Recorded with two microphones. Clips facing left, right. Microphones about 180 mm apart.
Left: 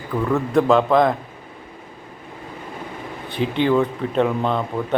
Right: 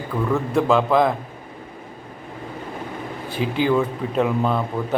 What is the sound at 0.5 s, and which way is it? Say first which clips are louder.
Speech: left 2 dB; centre (ahead or behind).